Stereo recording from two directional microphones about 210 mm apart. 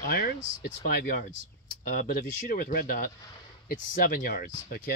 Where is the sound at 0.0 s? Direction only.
45° left (ahead or behind).